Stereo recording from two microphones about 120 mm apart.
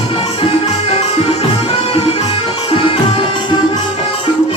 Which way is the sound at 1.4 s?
60° left (ahead or behind).